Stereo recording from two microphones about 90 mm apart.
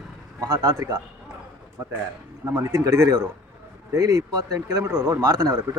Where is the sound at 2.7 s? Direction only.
35° right (ahead or behind).